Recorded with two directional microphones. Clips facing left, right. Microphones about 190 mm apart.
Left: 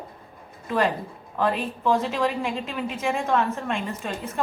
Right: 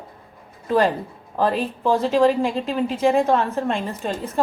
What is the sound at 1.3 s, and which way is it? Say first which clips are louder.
A woman's voice: right 4 dB; 35° right (ahead or behind).